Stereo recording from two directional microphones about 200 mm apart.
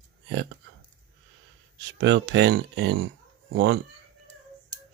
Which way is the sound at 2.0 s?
60° right (ahead or behind).